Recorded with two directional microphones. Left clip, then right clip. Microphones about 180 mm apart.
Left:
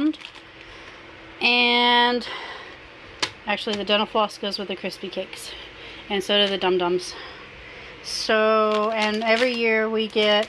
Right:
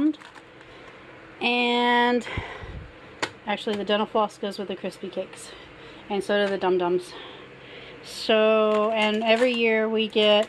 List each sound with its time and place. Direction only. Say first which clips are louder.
1.4 s speech: left 4 dB; 10° right (ahead or behind)
3.2 s speech: left 3 dB; 10° right (ahead or behind)
8.3 s speech: left 1 dB; 20° right (ahead or behind)